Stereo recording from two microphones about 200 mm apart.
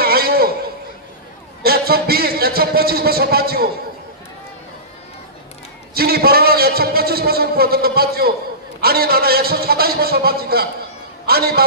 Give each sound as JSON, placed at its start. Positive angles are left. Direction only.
{"t": 0.0, "sound": "a sound", "side_deg": -50}
{"t": 1.6, "sound": "a man's voice", "side_deg": -50}
{"t": 5.9, "sound": "a man's voice", "side_deg": -50}